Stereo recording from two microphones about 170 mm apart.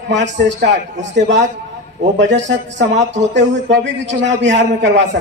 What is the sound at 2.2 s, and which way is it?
A man's voice, 90° right.